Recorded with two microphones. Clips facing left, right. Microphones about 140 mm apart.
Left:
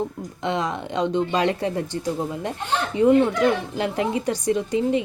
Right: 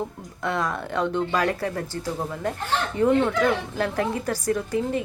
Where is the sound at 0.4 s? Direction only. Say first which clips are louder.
Left 1 dB; 20° left (ahead or behind).